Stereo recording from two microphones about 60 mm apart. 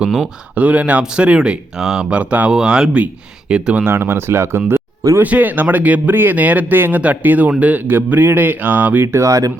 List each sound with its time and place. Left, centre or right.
0.0 s speech: centre
0.5 s speech: right
2.5 s speech: centre
3.8 s speech: right
5.2 s speech: right
9.1 s speech: right